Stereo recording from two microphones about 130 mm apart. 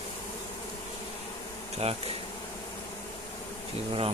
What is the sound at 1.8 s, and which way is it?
Speech, 50° right (ahead or behind).